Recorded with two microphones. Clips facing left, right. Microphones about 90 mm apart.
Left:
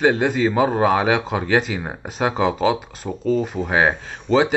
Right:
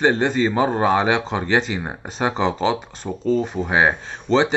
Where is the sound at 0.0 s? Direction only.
5° left (ahead or behind).